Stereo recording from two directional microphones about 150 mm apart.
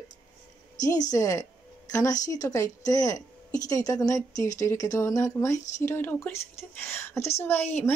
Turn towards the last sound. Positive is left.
turn(degrees=15)  # may be behind; listen again after turning